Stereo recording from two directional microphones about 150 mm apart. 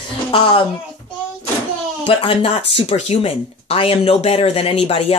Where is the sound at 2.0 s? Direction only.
35° left (ahead or behind).